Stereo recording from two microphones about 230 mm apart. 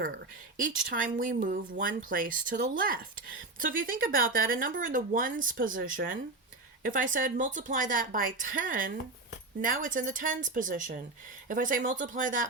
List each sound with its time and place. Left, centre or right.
0.5 s speech: right
6.9 s speech: right